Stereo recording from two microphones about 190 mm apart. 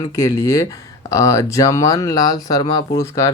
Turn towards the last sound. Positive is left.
turn(degrees=15)  # may be behind; listen again after turning